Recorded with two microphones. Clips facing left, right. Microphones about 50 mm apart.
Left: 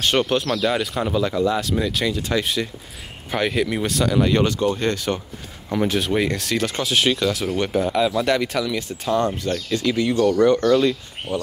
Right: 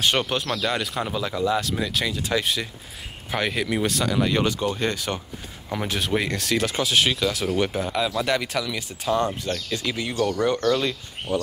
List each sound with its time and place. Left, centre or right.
0.0 s speech: centre